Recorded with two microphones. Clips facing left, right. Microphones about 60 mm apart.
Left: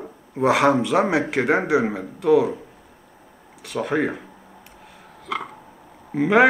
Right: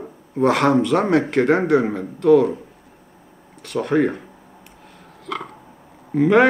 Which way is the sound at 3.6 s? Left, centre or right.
Centre.